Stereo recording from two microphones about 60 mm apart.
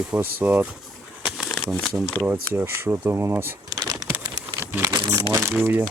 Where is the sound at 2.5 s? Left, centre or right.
Right.